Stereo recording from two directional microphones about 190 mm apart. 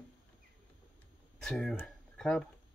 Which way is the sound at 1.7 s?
10° left (ahead or behind).